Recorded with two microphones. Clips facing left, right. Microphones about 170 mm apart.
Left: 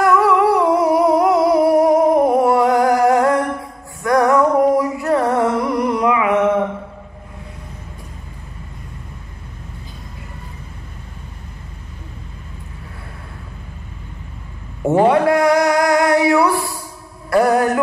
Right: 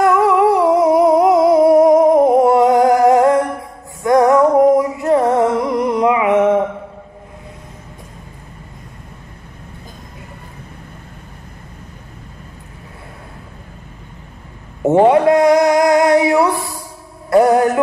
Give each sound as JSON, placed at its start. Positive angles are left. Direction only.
{"t": 0.0, "sound": "humming", "side_deg": -20}
{"t": 4.0, "sound": "music", "side_deg": -20}
{"t": 14.8, "sound": "a sound", "side_deg": -20}
{"t": 17.3, "sound": "music", "side_deg": -20}